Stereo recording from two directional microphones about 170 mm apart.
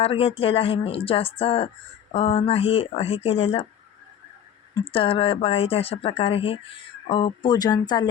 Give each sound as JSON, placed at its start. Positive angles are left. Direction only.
{"t": 0.0, "sound": "speech", "side_deg": 35}
{"t": 4.7, "sound": "speech", "side_deg": 30}